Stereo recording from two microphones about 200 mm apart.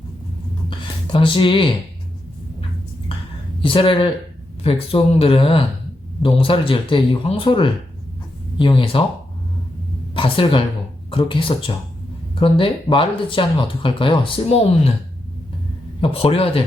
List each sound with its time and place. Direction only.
0.7 s speech: 25° left (ahead or behind)
3.6 s speech: 25° left (ahead or behind)
10.2 s a woman's voice: 25° left (ahead or behind)
16.0 s speech: 30° left (ahead or behind)